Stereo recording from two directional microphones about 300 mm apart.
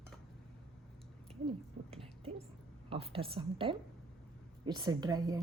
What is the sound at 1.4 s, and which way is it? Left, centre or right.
A woman's voice, centre.